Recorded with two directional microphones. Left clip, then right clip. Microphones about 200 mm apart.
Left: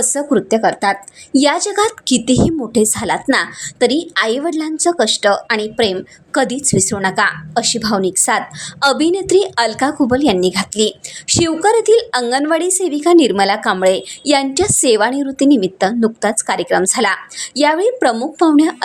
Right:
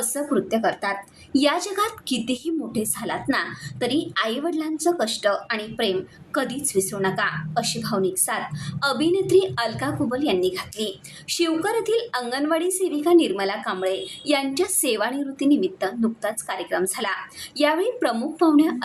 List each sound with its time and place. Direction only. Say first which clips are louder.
0.0 s a woman's voice: left 8 dB; 40° left (ahead or behind)